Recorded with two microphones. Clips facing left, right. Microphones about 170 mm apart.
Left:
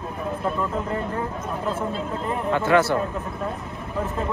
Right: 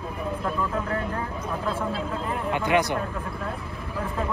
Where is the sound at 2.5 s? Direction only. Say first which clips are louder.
Left 4 dB; 15° right (ahead or behind).